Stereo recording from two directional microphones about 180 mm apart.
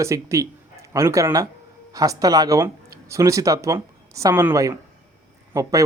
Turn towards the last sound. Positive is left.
turn(degrees=-20)  # may be behind; listen again after turning